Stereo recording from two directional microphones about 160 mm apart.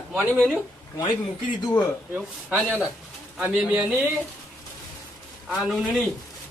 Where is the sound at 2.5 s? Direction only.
10° right (ahead or behind).